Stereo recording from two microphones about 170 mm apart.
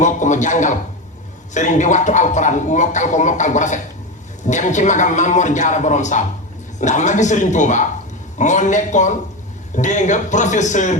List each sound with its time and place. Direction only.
0.0 s speech: 45° left (ahead or behind)